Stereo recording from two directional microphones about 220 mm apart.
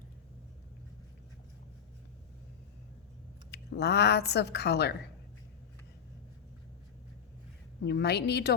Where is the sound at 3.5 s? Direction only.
50° left (ahead or behind).